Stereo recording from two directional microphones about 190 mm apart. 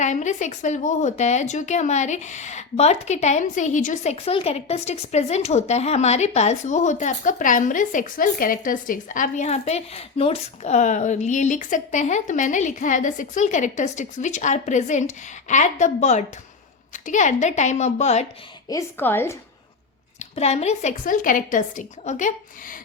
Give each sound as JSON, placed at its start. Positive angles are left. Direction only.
{"t": 0.0, "sound": "a woman's voice", "side_deg": 40}
{"t": 18.7, "sound": "a woman's voice", "side_deg": 15}
{"t": 20.1, "sound": "a woman's voice", "side_deg": 35}